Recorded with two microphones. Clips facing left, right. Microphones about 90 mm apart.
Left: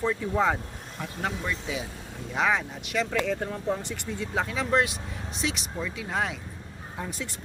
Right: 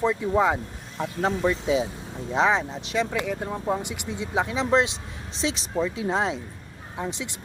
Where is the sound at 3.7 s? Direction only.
15° right (ahead or behind).